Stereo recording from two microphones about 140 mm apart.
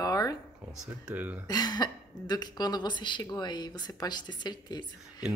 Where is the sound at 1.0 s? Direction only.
10° right (ahead or behind).